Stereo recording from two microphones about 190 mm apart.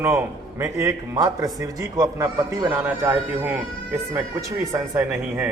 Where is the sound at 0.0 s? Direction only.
15° right (ahead or behind).